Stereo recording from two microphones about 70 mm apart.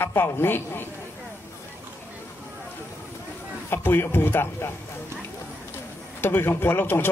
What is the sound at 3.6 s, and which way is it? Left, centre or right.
A man's voice, left.